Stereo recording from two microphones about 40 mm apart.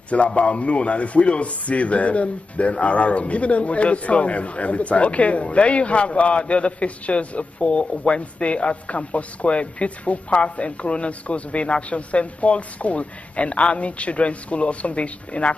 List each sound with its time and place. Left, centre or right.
0.4 s a man's voice: left